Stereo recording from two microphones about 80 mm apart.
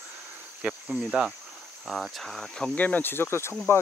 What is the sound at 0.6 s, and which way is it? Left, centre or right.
Cricket, centre.